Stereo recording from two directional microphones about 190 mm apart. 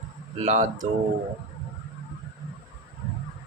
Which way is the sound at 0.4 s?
40° right (ahead or behind).